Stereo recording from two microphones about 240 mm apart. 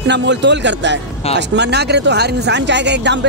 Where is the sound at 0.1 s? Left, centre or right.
Right.